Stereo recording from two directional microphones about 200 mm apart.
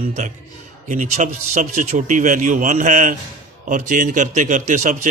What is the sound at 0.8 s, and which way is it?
A man's voice, 40° right (ahead or behind).